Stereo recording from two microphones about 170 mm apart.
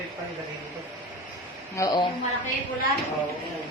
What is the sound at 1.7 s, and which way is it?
Speech, 20° left (ahead or behind).